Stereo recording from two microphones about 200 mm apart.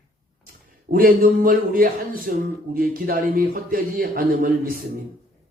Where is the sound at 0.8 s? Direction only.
45° right (ahead or behind).